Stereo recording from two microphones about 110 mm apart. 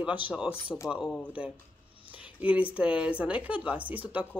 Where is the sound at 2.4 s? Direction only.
10° right (ahead or behind).